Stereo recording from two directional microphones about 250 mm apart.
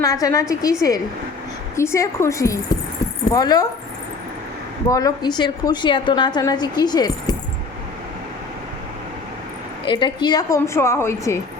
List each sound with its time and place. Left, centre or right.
0.0 s a woman's voice: centre
4.9 s a woman's voice: centre
9.8 s a woman's voice: centre